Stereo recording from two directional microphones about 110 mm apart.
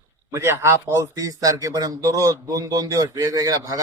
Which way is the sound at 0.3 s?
25° right (ahead or behind).